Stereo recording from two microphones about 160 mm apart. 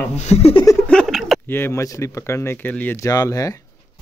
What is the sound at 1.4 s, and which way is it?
Speech, 15° left (ahead or behind).